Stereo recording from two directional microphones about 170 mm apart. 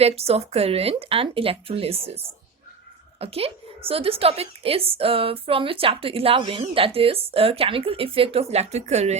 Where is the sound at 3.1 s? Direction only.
35° right (ahead or behind).